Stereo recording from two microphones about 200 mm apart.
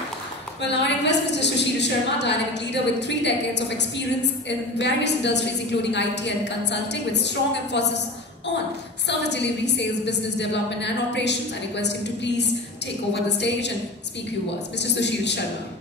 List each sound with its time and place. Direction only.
0.6 s a woman's voice: 60° left (ahead or behind)
9.0 s a woman's voice: 60° left (ahead or behind)
14.8 s a woman's voice: 60° left (ahead or behind)